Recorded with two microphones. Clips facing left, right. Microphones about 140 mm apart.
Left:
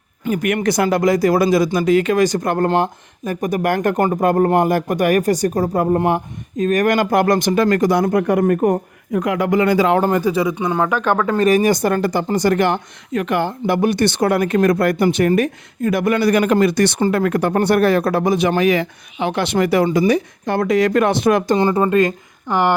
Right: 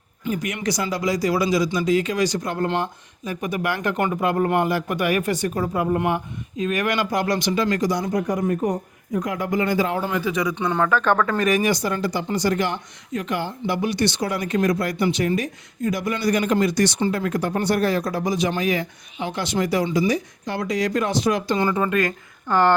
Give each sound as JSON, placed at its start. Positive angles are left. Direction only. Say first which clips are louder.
{"t": 0.3, "sound": "speech", "louder": "left 7 dB", "side_deg": 60}
{"t": 10.1, "sound": "speech", "louder": "left 7 dB", "side_deg": 40}
{"t": 10.5, "sound": "speech", "louder": "left 2 dB", "side_deg": 10}
{"t": 11.3, "sound": "speech", "louder": "left 6 dB", "side_deg": 35}
{"t": 21.6, "sound": "speech", "louder": "left 6 dB", "side_deg": 35}
{"t": 22.4, "sound": "speech", "louder": "left 1 dB", "side_deg": 15}